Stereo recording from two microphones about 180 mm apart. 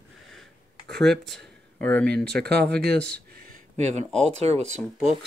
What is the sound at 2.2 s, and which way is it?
Speech, 65° right (ahead or behind).